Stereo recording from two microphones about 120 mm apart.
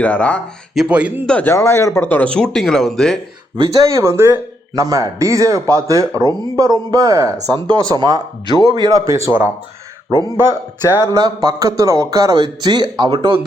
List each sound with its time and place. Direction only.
0.0 s speech: 10° left (ahead or behind)
0.7 s speech: 5° right (ahead or behind)
1.3 s speech: 10° left (ahead or behind)
1.5 s speech: 25° left (ahead or behind); by 3.2 s 5° left (ahead or behind)
3.6 s speech: 30° right (ahead or behind)
10.1 s speech: 35° left (ahead or behind)
11.0 s speech: 30° right (ahead or behind)